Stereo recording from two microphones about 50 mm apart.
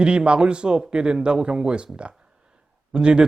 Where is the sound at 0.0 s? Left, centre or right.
Centre.